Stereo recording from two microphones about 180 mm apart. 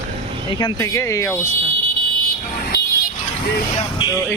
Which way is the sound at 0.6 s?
15° left (ahead or behind).